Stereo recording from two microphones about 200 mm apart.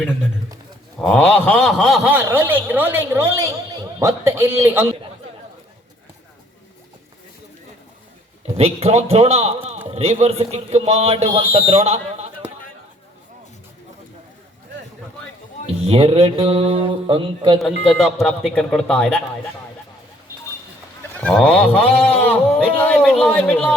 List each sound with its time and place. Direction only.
1.1 s speech: 5° left (ahead or behind); by 4.9 s 10° right (ahead or behind)
8.4 s a man's voice: 30° right (ahead or behind)
15.9 s speech: 30° right (ahead or behind)
17.8 s speech: centre (ahead or behind)
21.2 s speech: 5° left (ahead or behind)